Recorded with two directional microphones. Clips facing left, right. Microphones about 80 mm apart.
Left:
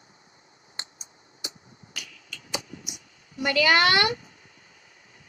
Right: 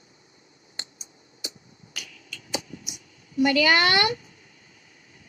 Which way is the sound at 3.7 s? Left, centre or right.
Left.